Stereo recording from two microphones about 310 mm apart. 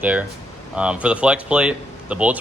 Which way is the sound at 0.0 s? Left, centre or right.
Centre.